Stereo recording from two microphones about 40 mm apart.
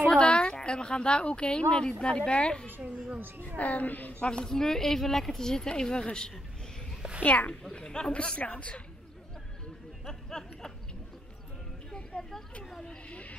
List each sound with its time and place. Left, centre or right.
0.1 s a sound: left
0.6 s speech: left
3.2 s a woman's voice: right
3.5 s a woman's voice: left
4.1 s speech: left
7.2 s a woman's voice: left
7.7 s a woman's voice: left
10.0 s a sound: centre
12.2 s a sound: centre
13.1 s horse: left